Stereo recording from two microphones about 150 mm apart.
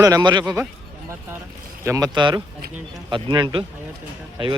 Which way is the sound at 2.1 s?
30° right (ahead or behind).